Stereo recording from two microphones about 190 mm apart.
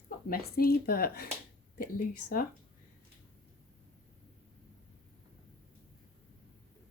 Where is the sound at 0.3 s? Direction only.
55° left (ahead or behind).